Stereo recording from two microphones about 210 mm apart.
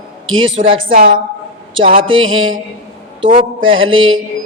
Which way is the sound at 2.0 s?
70° right (ahead or behind).